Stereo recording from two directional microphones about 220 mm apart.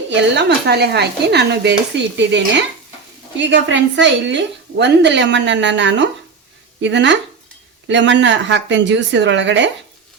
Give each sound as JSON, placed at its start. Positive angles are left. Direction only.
{"t": 0.1, "sound": "a woman's voice", "side_deg": -50}